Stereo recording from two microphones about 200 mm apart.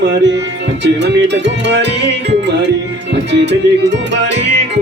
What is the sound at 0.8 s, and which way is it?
Music, 60° right (ahead or behind).